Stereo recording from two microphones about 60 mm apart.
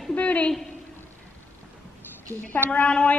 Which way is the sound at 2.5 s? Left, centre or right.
Left.